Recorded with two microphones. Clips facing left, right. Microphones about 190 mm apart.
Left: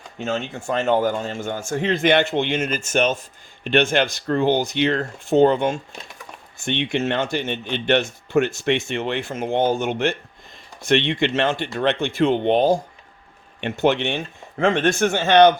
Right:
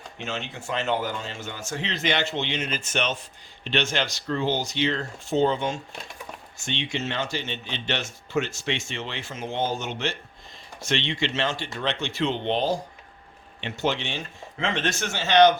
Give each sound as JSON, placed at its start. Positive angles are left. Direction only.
{"t": 0.2, "sound": "a man's voice", "side_deg": 50}